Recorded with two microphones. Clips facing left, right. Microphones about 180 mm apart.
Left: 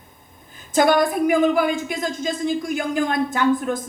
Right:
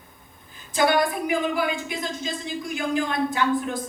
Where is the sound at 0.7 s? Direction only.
45° left (ahead or behind).